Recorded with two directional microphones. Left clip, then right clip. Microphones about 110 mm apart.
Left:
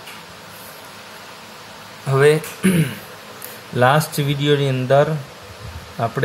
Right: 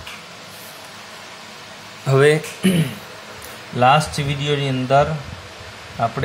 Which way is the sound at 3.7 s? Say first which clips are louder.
Right 1 dB; 55° left (ahead or behind).